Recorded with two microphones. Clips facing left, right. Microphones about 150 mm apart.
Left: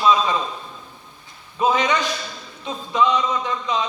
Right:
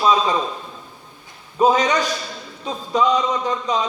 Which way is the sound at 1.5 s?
40° right (ahead or behind).